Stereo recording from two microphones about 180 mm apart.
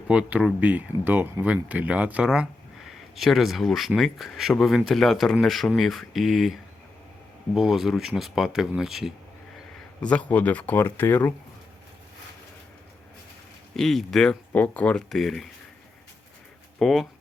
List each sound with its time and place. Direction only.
0.1 s speech: 5° right (ahead or behind); by 11.3 s 10° left (ahead or behind)
13.7 s speech: centre (ahead or behind)
16.7 s speech: centre (ahead or behind)